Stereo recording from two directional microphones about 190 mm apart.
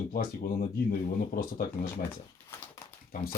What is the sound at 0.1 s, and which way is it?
Speech, 50° left (ahead or behind).